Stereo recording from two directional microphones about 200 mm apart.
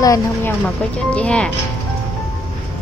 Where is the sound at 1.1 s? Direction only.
5° left (ahead or behind).